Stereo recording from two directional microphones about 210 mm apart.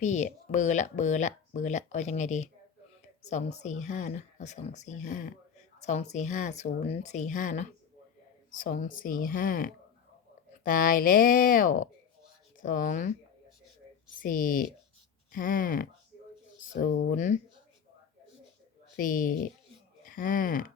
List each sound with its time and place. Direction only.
0.0 s speech: 35° left (ahead or behind)
14.2 s speech: 40° left (ahead or behind)
18.9 s speech: 40° left (ahead or behind)